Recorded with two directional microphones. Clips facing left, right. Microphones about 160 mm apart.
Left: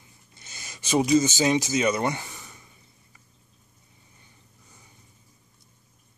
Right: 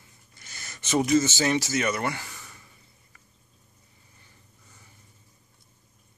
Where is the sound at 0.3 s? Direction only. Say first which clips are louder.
Even; 20° left (ahead or behind).